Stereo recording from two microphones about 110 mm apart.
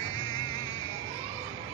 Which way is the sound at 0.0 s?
40° left (ahead or behind).